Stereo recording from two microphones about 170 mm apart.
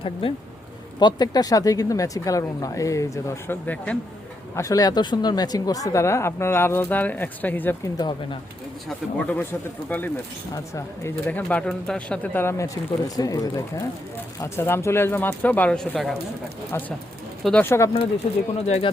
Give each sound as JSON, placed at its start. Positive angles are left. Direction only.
{"t": 0.0, "sound": "speech", "side_deg": 30}
{"t": 7.9, "sound": "speech", "side_deg": 25}
{"t": 9.1, "sound": "speech", "side_deg": 10}
{"t": 16.7, "sound": "speech", "side_deg": 15}